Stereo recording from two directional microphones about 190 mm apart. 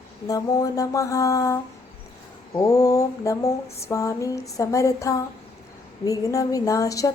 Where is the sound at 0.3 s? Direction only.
20° left (ahead or behind).